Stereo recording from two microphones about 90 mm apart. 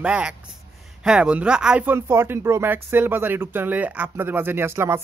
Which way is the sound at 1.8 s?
25° right (ahead or behind).